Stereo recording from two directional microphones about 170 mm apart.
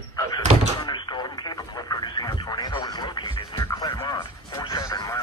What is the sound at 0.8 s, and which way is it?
Radio, 25° left (ahead or behind).